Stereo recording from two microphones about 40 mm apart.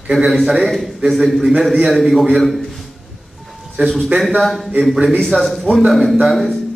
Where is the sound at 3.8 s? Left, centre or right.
Right.